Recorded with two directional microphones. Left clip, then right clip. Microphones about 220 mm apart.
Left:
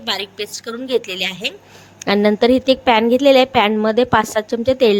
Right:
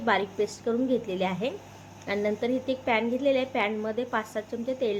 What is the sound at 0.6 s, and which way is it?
A woman's voice, 45° left (ahead or behind).